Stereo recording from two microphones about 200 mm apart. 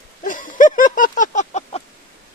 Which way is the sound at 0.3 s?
40° left (ahead or behind).